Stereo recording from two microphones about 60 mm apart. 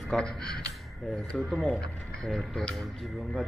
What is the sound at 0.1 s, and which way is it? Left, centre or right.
Speech, centre.